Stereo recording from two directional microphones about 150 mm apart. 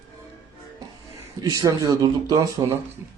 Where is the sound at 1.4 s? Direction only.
25° right (ahead or behind).